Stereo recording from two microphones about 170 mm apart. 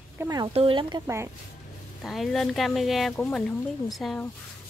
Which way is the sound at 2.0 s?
Centre (ahead or behind).